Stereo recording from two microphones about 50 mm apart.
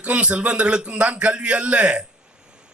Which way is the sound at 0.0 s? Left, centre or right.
Right.